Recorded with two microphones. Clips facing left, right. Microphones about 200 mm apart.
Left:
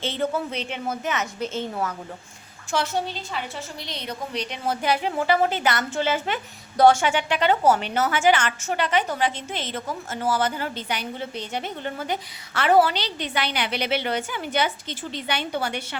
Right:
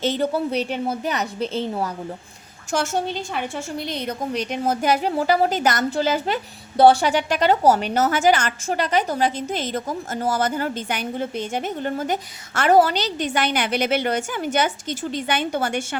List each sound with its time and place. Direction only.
0.0 s a woman's voice: 40° right (ahead or behind)
2.7 s a woman's voice: 45° right (ahead or behind)